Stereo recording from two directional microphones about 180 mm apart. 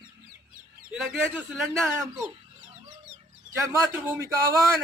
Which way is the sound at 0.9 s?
Centre (ahead or behind).